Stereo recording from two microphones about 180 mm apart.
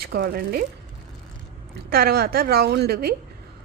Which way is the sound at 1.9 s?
60° right (ahead or behind).